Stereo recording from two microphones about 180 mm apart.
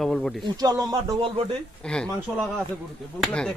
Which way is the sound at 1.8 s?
5° left (ahead or behind).